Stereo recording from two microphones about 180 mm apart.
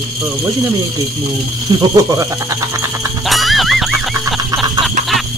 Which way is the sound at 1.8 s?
20° right (ahead or behind).